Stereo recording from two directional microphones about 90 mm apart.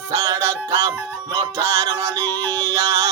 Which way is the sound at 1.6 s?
30° right (ahead or behind).